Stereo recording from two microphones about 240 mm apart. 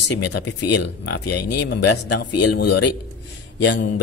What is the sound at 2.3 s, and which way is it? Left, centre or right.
Speech, left.